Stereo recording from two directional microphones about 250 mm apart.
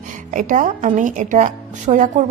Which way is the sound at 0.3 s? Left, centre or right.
Right.